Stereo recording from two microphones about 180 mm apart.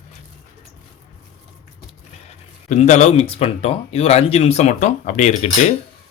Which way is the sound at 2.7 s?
40° left (ahead or behind).